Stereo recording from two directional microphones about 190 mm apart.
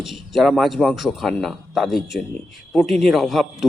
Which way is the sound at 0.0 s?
Centre (ahead or behind).